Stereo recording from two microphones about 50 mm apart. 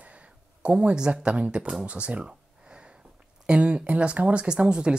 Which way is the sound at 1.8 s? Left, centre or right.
Right.